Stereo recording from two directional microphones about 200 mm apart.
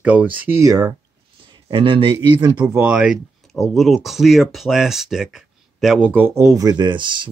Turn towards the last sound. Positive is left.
turn(degrees=-25)  # may be behind; listen again after turning